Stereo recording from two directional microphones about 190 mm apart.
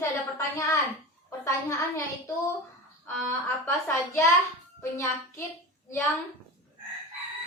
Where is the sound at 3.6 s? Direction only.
15° left (ahead or behind).